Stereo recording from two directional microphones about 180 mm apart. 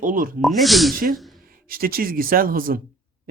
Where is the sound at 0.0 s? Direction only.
50° right (ahead or behind).